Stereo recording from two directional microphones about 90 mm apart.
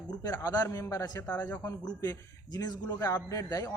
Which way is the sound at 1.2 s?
15° left (ahead or behind).